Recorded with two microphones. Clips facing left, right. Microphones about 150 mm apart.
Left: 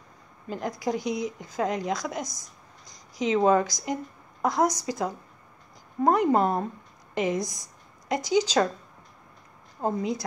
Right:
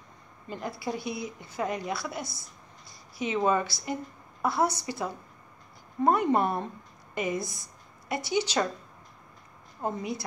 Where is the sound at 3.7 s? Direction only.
15° left (ahead or behind).